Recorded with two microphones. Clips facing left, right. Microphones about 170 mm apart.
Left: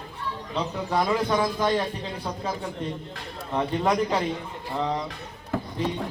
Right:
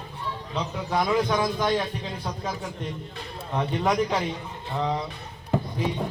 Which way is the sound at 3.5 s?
5° left (ahead or behind).